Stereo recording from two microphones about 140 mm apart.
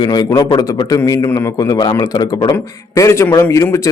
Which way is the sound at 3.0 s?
20° left (ahead or behind).